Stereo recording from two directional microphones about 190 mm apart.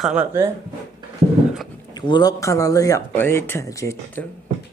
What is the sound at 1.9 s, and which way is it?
Speech, 20° left (ahead or behind).